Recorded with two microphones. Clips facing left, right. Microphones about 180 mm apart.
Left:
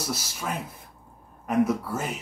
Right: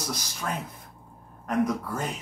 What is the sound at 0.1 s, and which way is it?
Speech, 5° left (ahead or behind).